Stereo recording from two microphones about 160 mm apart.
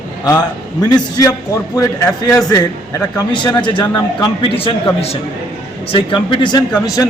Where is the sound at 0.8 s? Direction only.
25° left (ahead or behind).